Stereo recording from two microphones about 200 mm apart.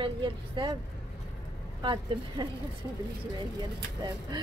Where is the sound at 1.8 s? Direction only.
25° right (ahead or behind).